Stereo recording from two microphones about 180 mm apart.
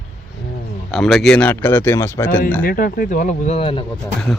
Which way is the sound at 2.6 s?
55° left (ahead or behind).